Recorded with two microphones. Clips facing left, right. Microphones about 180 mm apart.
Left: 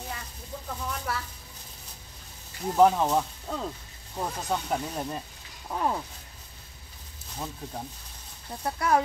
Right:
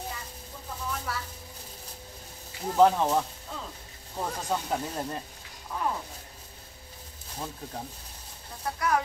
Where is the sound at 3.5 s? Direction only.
45° left (ahead or behind).